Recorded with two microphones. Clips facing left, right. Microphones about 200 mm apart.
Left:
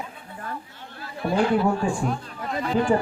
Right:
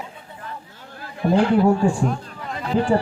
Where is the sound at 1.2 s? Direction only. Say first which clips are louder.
Right 6 dB; 40° right (ahead or behind).